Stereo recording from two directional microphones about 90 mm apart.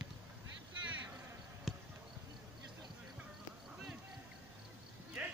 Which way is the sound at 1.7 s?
Centre (ahead or behind).